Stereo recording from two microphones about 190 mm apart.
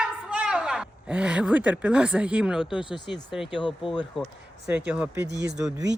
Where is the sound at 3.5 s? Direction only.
25° left (ahead or behind).